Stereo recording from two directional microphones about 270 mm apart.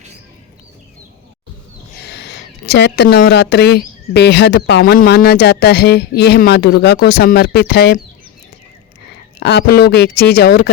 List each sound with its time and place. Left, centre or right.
2.0 s speech: left
9.4 s speech: left